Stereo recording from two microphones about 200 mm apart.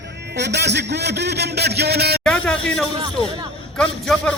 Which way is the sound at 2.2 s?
5° left (ahead or behind).